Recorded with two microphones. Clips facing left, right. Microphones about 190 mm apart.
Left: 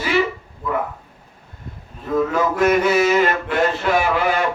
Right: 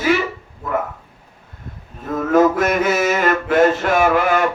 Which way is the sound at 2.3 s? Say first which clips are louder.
Right 5 dB; 45° right (ahead or behind).